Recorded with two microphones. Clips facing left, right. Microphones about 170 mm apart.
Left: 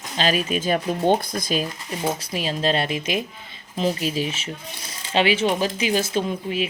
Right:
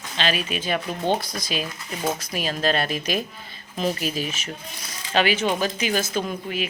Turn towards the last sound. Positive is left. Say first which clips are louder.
# left 3 dB
turn(degrees=30)  # may be behind; listen again after turning